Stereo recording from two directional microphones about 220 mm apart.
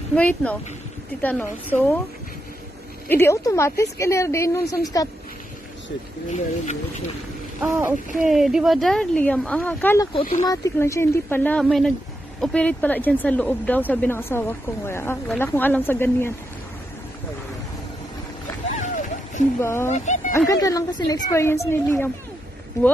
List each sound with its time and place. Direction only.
0.1 s speech: 5° left (ahead or behind)
3.1 s speech: 10° left (ahead or behind)
6.3 s speech: 30° left (ahead or behind)
8.3 s speech: centre (ahead or behind)
18.8 s a sound: 35° left (ahead or behind)
19.6 s speech: 10° left (ahead or behind)
19.9 s speech: 35° left (ahead or behind)
20.3 s speech: 15° left (ahead or behind)